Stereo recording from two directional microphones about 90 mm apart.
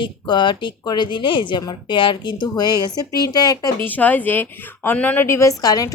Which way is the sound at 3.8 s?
20° left (ahead or behind).